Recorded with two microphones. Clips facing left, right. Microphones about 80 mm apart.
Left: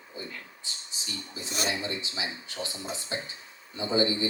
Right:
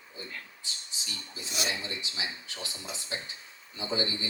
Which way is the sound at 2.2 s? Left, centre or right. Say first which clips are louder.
Left 3 dB; left.